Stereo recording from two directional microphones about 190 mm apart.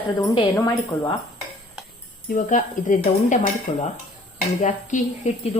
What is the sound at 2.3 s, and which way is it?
Speech, 45° left (ahead or behind).